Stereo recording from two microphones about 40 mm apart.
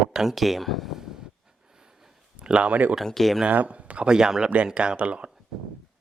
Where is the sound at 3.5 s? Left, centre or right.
Right.